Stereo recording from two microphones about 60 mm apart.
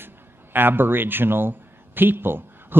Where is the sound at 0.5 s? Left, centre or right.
Right.